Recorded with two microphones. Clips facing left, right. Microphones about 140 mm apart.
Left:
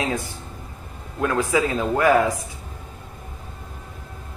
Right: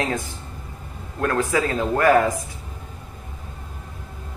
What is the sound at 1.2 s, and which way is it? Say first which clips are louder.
Speech: even; 10° left (ahead or behind).